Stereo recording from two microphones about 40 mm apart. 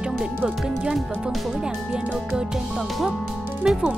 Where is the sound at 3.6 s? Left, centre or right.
Centre.